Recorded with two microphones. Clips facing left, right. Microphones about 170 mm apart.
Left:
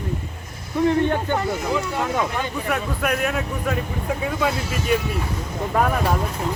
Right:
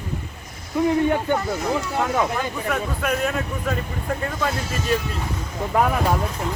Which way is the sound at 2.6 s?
5° left (ahead or behind).